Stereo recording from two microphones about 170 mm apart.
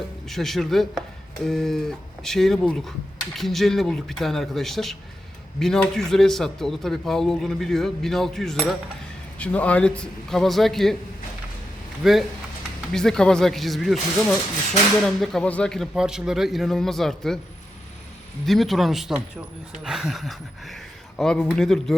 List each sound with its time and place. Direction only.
0.3 s a man's voice: centre (ahead or behind)
12.0 s a man's voice: centre (ahead or behind)
18.4 s a man's voice: centre (ahead or behind)